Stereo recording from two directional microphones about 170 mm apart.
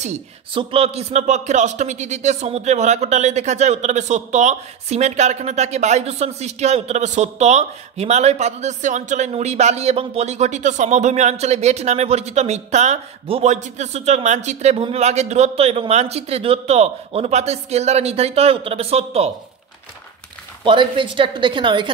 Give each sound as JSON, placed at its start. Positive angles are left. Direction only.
{"t": 0.6, "sound": "speech", "side_deg": -35}
{"t": 20.6, "sound": "speech", "side_deg": -30}